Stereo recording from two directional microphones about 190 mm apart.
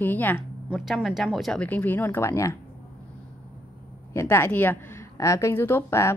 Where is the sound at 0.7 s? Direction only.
Centre (ahead or behind); by 2.5 s 15° left (ahead or behind).